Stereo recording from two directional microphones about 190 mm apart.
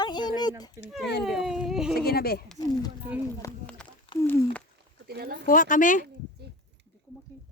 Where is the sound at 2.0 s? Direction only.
55° left (ahead or behind).